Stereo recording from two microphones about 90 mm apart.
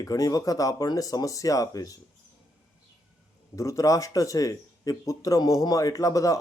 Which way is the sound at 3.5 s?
35° left (ahead or behind).